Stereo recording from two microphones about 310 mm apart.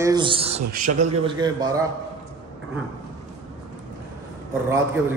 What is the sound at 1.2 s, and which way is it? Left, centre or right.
Speech, centre.